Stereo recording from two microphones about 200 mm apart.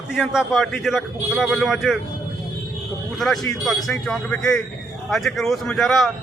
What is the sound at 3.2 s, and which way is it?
Speech, centre (ahead or behind).